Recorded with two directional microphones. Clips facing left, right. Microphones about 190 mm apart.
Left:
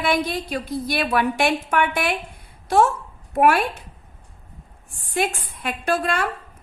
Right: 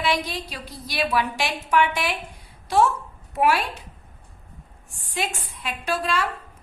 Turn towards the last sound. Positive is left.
turn(degrees=55)  # may be behind; listen again after turning